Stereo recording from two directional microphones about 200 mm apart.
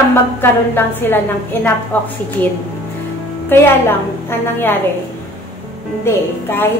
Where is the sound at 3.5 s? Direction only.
10° left (ahead or behind).